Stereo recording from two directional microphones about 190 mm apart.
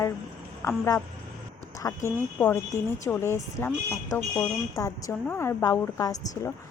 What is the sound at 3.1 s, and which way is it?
Speech, 10° left (ahead or behind).